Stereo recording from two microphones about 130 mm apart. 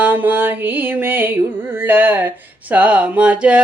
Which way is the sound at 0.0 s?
15° right (ahead or behind).